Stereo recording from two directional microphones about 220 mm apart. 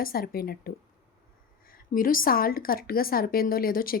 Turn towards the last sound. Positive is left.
turn(degrees=40)  # may be behind; listen again after turning